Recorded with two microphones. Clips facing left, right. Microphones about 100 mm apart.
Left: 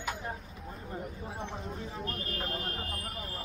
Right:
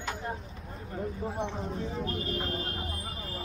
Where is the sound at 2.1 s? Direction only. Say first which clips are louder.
Right 4 dB; 20° right (ahead or behind).